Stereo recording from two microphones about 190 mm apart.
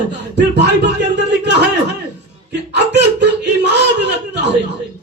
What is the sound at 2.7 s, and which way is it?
Speech, 65° right (ahead or behind).